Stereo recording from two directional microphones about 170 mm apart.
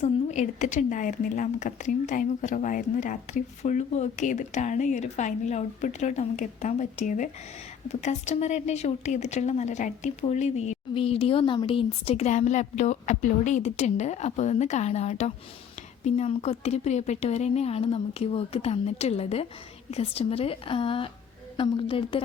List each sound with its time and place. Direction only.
0.0 s a woman's voice: 45° left (ahead or behind)